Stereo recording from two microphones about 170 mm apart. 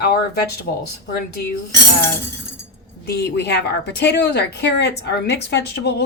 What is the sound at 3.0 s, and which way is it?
A woman's voice, 75° left (ahead or behind).